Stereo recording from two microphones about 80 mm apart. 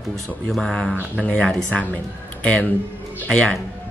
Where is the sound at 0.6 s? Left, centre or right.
Centre.